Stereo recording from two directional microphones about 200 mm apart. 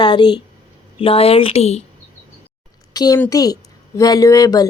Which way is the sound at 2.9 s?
20° left (ahead or behind).